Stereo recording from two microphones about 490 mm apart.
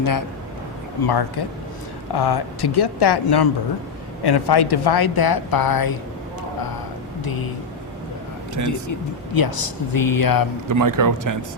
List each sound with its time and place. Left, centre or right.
0.0 s a man's voice: left
8.6 s a woman's voice: left
10.7 s a man's voice: right